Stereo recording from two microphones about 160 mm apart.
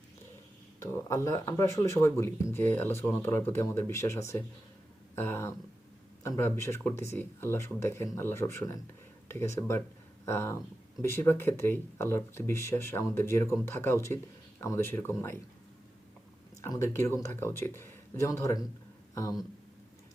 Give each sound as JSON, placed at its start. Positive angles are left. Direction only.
{"t": 0.8, "sound": "speech", "side_deg": 15}
{"t": 16.6, "sound": "speech", "side_deg": 20}